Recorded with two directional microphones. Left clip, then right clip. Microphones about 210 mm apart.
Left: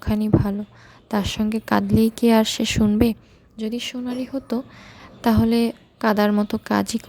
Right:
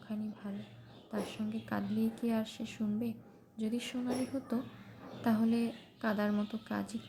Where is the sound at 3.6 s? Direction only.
40° left (ahead or behind).